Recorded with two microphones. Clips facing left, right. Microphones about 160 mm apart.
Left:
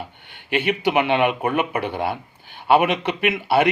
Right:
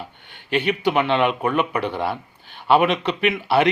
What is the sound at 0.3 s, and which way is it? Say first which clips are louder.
Speech: even; 55° left (ahead or behind).